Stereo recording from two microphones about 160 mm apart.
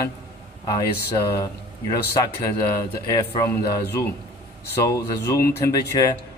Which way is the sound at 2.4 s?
20° left (ahead or behind).